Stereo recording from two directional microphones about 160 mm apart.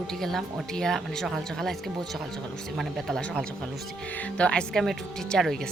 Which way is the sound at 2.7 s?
5° left (ahead or behind).